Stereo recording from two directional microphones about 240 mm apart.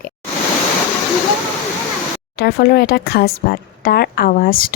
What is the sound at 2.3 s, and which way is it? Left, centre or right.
Speech, left.